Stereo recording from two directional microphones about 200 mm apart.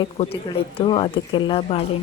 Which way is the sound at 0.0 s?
25° left (ahead or behind).